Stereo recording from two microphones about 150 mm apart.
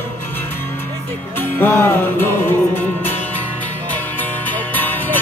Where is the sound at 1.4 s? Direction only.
15° left (ahead or behind).